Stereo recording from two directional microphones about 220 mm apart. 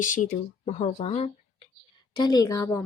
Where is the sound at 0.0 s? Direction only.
35° left (ahead or behind).